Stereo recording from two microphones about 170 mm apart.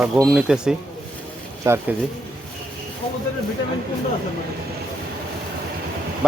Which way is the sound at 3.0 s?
35° left (ahead or behind).